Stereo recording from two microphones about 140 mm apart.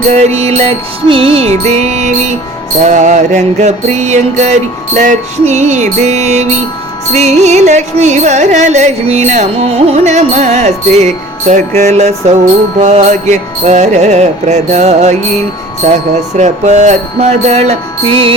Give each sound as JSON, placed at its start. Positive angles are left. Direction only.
{"t": 0.1, "sound": "carnatic music", "side_deg": -50}
{"t": 2.8, "sound": "music", "side_deg": -60}
{"t": 7.1, "sound": "carnatic music", "side_deg": -55}
{"t": 12.8, "sound": "music", "side_deg": -55}